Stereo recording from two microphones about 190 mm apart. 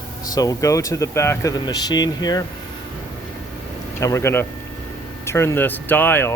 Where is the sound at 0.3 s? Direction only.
15° left (ahead or behind).